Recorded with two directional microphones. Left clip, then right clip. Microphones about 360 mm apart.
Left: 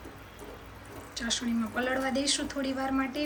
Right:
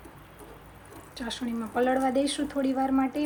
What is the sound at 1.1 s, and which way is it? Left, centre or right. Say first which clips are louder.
A woman's voice: left 2 dB; centre.